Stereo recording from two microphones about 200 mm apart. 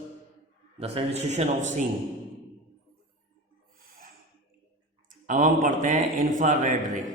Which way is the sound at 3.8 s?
45° right (ahead or behind).